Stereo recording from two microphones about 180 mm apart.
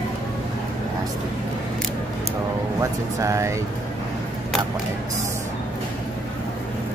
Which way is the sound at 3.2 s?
15° right (ahead or behind).